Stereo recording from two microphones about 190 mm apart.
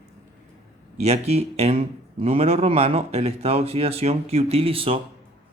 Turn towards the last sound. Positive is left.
turn(degrees=-30)  # may be behind; listen again after turning